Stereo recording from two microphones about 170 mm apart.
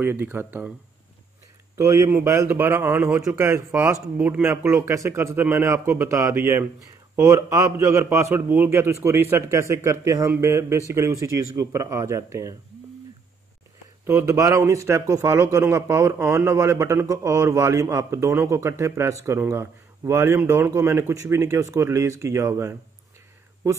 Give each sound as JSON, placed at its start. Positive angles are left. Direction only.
{"t": 0.0, "sound": "a man's voice", "side_deg": -10}
{"t": 1.8, "sound": "a man's voice", "side_deg": -15}
{"t": 14.0, "sound": "a man's voice", "side_deg": -15}